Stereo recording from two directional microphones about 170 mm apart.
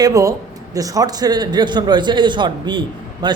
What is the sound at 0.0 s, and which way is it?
Speech, 20° right (ahead or behind).